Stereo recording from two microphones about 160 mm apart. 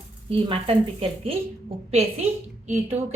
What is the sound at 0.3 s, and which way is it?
A woman's voice, 35° right (ahead or behind).